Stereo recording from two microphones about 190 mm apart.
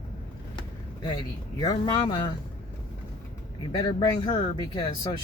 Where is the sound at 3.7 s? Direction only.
25° left (ahead or behind).